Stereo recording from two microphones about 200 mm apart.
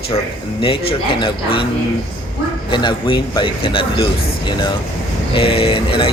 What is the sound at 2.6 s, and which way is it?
A man's voice, 25° left (ahead or behind).